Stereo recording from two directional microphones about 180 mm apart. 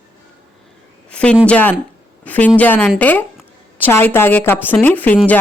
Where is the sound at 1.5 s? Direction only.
10° left (ahead or behind).